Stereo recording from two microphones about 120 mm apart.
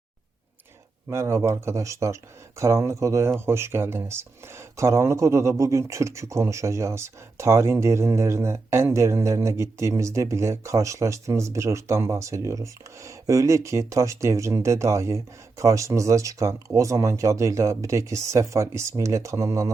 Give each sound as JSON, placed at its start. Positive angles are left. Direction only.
{"t": 1.1, "sound": "speech", "side_deg": -25}